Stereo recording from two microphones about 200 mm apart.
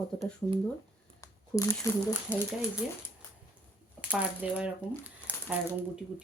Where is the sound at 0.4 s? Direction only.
15° left (ahead or behind).